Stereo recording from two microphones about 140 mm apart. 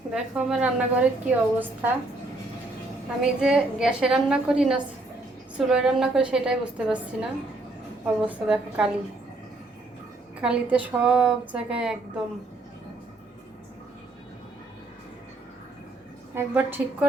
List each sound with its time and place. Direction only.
0.1 s a woman's voice: 5° right (ahead or behind)
3.2 s a woman's voice: 5° right (ahead or behind)
10.4 s a woman's voice: 10° right (ahead or behind)
16.3 s a woman's voice: 15° right (ahead or behind)